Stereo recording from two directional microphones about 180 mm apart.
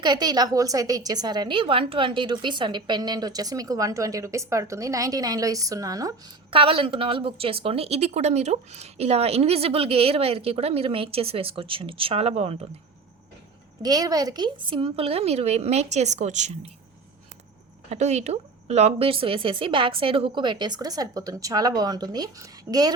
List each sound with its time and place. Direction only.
0.0 s a woman's voice: 20° right (ahead or behind)
13.8 s speech: 20° right (ahead or behind); by 16.5 s 40° right (ahead or behind)
17.8 s a woman's voice: 35° right (ahead or behind); by 22.9 s 20° right (ahead or behind)